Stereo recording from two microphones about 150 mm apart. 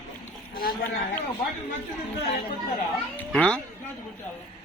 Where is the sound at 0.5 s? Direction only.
75° left (ahead or behind).